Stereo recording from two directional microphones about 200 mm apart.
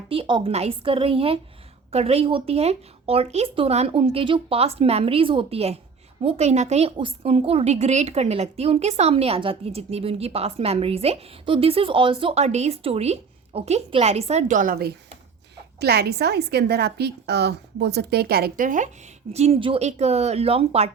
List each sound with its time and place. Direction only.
0.1 s a woman's voice: 25° right (ahead or behind); by 18.9 s 40° right (ahead or behind)
19.3 s a woman's voice: 30° right (ahead or behind)